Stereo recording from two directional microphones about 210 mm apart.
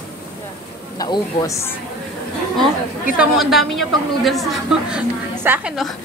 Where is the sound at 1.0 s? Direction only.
20° left (ahead or behind).